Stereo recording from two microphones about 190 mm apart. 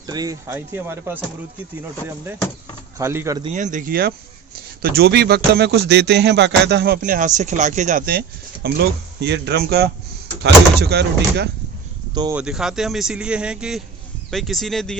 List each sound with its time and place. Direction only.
0.1 s speech: 20° right (ahead or behind)
3.0 s speech: 15° right (ahead or behind)
3.4 s a man's voice: 40° right (ahead or behind)
8.6 s a man's voice: 60° right (ahead or behind)
12.3 s speech: 5° right (ahead or behind)